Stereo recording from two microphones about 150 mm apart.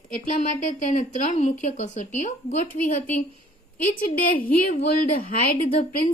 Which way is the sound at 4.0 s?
70° left (ahead or behind).